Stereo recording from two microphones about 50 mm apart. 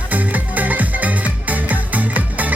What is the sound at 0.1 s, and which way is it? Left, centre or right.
Music, right.